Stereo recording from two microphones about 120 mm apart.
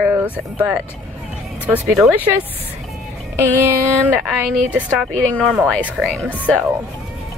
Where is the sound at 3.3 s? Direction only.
20° right (ahead or behind).